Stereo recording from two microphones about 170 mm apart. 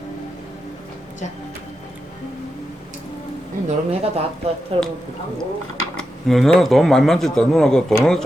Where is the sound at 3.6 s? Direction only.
40° right (ahead or behind).